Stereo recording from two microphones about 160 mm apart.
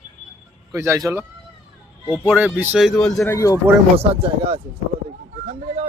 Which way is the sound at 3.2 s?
20° left (ahead or behind).